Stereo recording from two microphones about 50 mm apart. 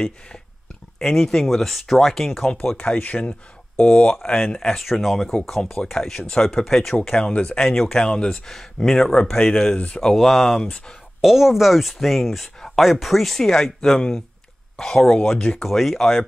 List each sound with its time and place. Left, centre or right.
0.9 s speech: centre
2.8 s speech: left
3.7 s speech: centre
6.6 s speech: centre
7.1 s speech: centre
8.5 s speech: centre
9.8 s speech: left
10.0 s speech: centre
11.1 s speech: centre